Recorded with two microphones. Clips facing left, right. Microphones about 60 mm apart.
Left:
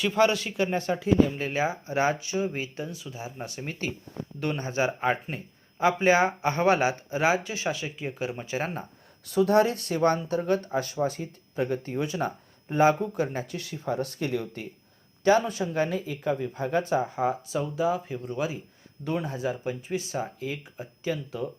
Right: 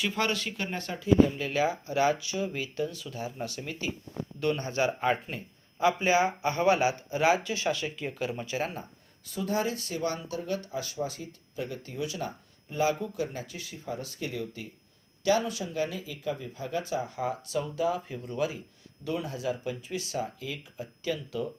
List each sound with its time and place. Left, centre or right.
0.0 s a man's voice: centre
1.0 s speech: left; by 3.5 s centre
3.5 s speech: left
4.4 s speech: left
5.8 s speech: left
9.3 s speech: left
13.5 s speech: left
15.2 s speech: left; by 18.6 s centre
19.0 s speech: left